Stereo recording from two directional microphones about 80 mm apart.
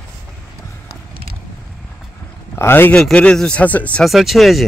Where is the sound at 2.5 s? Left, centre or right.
Left.